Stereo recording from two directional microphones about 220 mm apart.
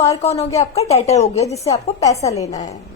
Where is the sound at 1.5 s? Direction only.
15° left (ahead or behind).